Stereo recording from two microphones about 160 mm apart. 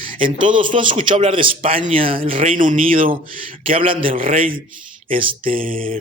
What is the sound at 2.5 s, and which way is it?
Speech, 55° right (ahead or behind).